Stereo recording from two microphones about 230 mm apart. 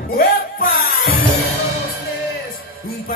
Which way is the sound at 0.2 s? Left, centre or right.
Left.